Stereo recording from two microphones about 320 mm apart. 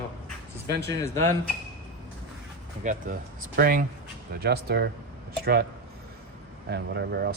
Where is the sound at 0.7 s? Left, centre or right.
Right.